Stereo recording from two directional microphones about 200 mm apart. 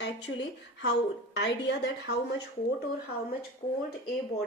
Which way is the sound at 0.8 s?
60° left (ahead or behind).